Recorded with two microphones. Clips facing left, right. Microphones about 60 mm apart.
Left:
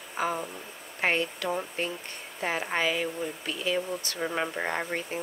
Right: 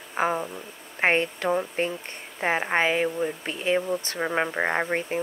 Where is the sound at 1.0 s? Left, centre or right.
Right.